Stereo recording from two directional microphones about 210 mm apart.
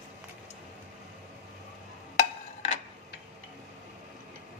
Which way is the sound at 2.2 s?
30° left (ahead or behind).